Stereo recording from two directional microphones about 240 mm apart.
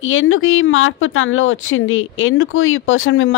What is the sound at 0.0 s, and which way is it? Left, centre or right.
A woman's voice, left.